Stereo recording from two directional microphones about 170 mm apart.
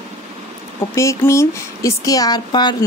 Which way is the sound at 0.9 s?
15° left (ahead or behind).